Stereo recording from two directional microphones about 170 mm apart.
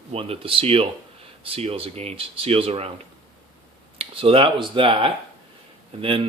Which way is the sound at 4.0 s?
35° right (ahead or behind).